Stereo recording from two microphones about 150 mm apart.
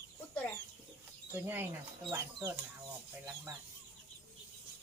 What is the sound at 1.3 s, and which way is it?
Speech, 15° right (ahead or behind).